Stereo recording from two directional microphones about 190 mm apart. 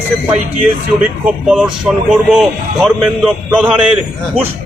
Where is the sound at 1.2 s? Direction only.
5° right (ahead or behind).